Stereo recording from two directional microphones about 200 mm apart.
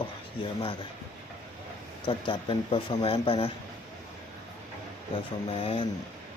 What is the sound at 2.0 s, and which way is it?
Speech, 25° left (ahead or behind).